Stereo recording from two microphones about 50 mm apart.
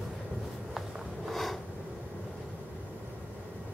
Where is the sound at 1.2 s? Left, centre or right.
Centre.